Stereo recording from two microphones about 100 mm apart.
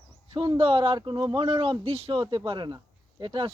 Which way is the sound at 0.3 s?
60° right (ahead or behind).